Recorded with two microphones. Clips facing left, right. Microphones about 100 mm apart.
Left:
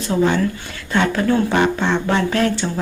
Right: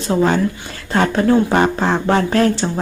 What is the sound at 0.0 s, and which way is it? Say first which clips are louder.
Speech: right 2 dB; 35° right (ahead or behind).